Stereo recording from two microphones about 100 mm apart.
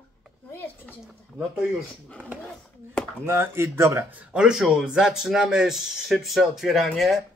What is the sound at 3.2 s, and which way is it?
Speech, 25° right (ahead or behind).